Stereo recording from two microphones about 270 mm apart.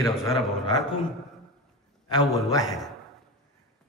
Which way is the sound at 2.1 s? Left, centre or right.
Centre.